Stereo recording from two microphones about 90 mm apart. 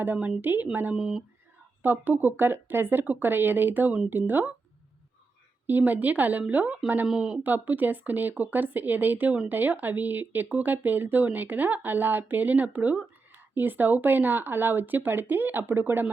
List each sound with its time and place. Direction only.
0.0 s speech: 20° right (ahead or behind)
0.9 s speech: 5° right (ahead or behind)
1.8 s speech: 20° right (ahead or behind)
5.6 s speech: 20° right (ahead or behind)
7.1 s speech: 5° right (ahead or behind)
7.4 s speech: 20° right (ahead or behind)